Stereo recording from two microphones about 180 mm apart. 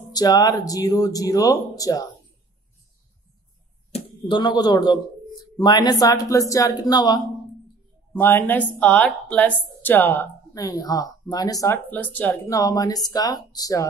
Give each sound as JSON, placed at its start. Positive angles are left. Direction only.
{"t": 0.1, "sound": "speech", "side_deg": 20}
{"t": 3.9, "sound": "speech", "side_deg": 25}
{"t": 8.1, "sound": "speech", "side_deg": 10}